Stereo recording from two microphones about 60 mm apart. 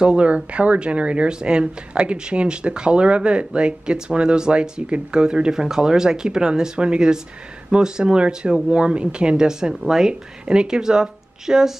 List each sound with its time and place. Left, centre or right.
0.0 s speech: centre